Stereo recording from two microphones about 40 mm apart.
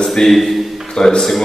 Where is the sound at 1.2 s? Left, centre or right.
Centre.